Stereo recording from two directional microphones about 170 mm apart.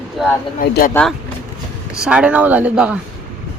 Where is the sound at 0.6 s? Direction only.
55° left (ahead or behind).